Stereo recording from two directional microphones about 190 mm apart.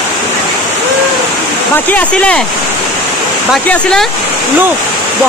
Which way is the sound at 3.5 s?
5° left (ahead or behind).